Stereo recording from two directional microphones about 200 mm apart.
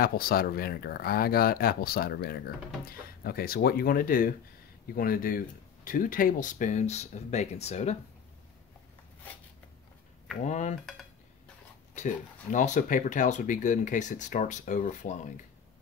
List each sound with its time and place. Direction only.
0.0 s speech: 50° left (ahead or behind)
10.4 s speech: 35° left (ahead or behind)
11.9 s speech: 40° left (ahead or behind)